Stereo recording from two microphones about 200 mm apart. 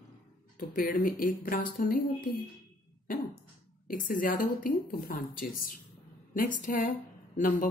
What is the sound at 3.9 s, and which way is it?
Speech, 40° left (ahead or behind).